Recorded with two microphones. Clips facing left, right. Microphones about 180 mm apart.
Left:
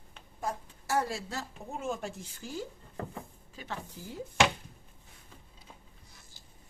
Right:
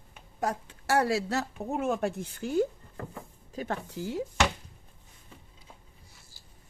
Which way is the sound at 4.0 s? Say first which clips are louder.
Right 9 dB; 80° right.